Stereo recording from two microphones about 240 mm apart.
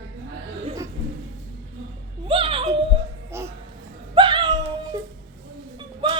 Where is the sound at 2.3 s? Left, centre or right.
Right.